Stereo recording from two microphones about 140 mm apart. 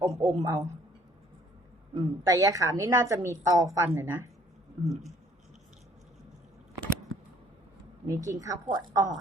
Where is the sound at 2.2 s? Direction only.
25° right (ahead or behind).